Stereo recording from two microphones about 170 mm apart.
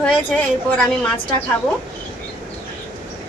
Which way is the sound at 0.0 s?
10° left (ahead or behind).